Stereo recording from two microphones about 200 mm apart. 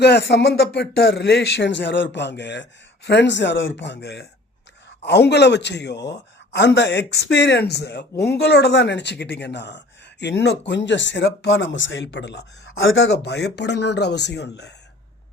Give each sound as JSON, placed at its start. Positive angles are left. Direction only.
{"t": 0.0, "sound": "a man's voice", "side_deg": 55}